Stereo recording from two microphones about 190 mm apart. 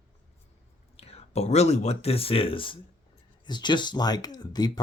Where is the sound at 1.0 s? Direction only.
35° left (ahead or behind).